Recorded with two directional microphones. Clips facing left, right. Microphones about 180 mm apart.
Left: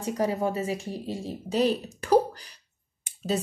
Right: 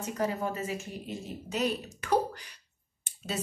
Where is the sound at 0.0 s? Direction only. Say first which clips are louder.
Left 5 dB; 35° left (ahead or behind).